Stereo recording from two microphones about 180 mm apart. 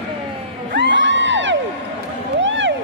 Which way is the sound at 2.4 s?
90° right.